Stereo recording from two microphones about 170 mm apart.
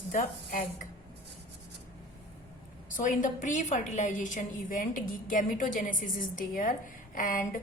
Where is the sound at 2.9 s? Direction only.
50° left (ahead or behind).